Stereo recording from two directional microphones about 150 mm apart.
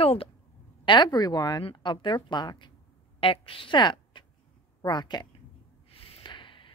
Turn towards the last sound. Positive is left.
turn(degrees=35)  # may be behind; listen again after turning